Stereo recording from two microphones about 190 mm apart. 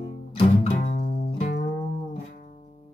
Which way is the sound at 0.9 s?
50° left (ahead or behind).